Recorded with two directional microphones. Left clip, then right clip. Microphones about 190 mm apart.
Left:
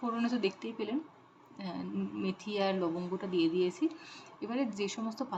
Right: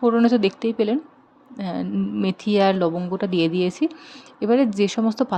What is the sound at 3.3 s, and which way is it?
Speech, 55° right (ahead or behind).